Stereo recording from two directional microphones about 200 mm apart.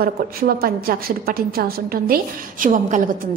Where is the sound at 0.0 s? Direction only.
50° right (ahead or behind).